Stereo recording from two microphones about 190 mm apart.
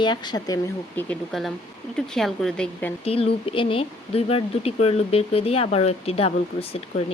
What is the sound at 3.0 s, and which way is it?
Speech, 30° left (ahead or behind).